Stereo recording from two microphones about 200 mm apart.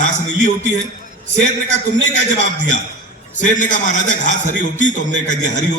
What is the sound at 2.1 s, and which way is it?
A man's voice, 35° left (ahead or behind).